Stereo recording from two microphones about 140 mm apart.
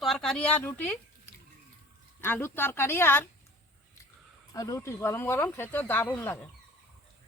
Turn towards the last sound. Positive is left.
turn(degrees=15)  # may be behind; listen again after turning